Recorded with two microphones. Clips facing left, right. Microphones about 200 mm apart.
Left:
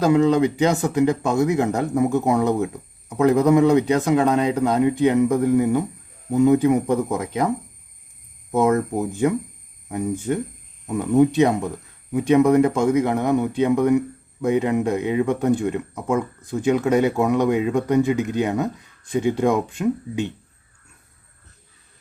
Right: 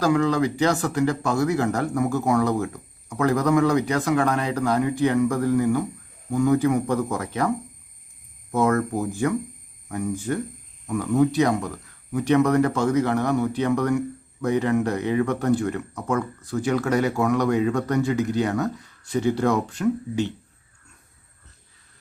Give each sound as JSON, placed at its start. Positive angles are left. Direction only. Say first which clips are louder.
{"t": 0.0, "sound": "speech", "louder": "left 4 dB", "side_deg": 20}
{"t": 8.5, "sound": "speech", "louder": "left 2 dB", "side_deg": 20}